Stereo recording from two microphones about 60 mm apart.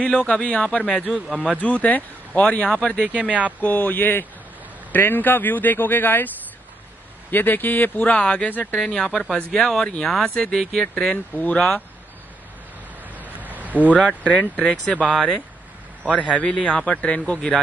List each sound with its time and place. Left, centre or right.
0.0 s speech: left
1.0 s a man's voice: centre
1.6 s speech: left
3.1 s speech: right
3.6 s a man's voice: left
8.8 s speech: centre
11.3 s speech: left
13.1 s a sound: right
13.8 s speech: centre
16.3 s speech: centre